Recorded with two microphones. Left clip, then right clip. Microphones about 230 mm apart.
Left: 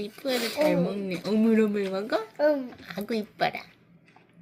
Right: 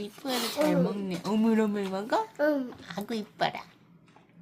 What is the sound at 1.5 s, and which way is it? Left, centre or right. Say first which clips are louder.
Speech: left 4 dB; centre.